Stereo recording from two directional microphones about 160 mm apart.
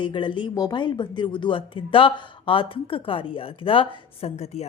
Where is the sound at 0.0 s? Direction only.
30° left (ahead or behind).